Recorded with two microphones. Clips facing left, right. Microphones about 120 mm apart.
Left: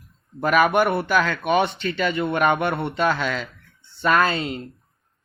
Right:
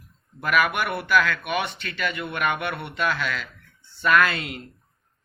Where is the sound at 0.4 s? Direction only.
30° left (ahead or behind).